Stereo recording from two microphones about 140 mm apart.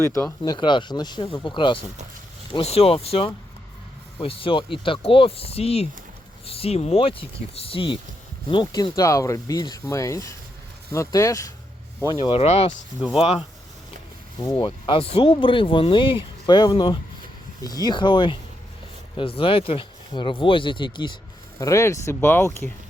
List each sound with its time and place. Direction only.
0.0 s speech: 20° left (ahead or behind)
0.4 s speech: 35° left (ahead or behind)
8.6 s speech: 25° left (ahead or behind)
12.2 s speech: 45° left (ahead or behind)
14.6 s speech: 40° left (ahead or behind)
21.6 s speech: 20° left (ahead or behind)